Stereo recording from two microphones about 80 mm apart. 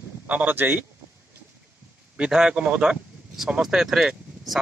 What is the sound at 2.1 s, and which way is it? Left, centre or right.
A man's voice, centre.